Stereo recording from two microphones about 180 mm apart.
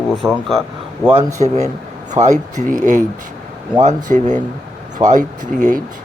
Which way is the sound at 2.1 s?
40° right (ahead or behind).